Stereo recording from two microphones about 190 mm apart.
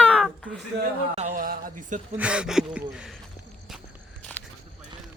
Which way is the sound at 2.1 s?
5° right (ahead or behind).